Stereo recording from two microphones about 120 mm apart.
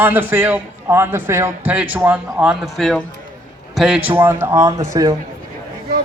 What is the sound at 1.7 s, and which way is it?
Speech, 10° right (ahead or behind).